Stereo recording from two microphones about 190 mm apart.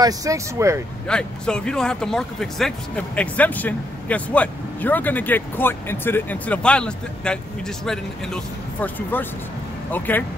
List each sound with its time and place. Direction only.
0.0 s speech: 15° right (ahead or behind)
1.0 s speech: 5° left (ahead or behind)